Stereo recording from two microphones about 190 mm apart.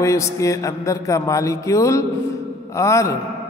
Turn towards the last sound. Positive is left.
turn(degrees=15)  # may be behind; listen again after turning